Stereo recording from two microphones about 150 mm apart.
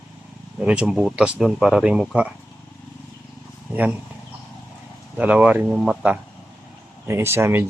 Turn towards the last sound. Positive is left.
turn(degrees=-15)  # may be behind; listen again after turning